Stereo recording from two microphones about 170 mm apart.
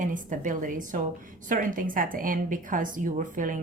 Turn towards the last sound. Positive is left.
turn(degrees=-50)  # may be behind; listen again after turning